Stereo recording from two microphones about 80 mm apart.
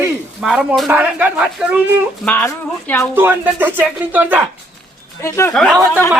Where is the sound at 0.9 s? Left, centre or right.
Right.